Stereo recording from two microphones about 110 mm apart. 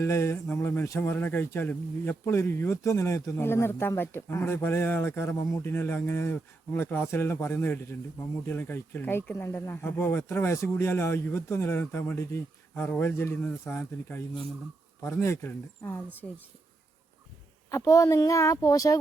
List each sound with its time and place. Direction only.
0.0 s speech: 25° left (ahead or behind)
17.7 s speech: 25° left (ahead or behind)